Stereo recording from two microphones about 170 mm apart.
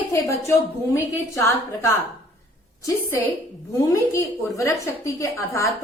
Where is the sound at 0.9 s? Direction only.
15° left (ahead or behind).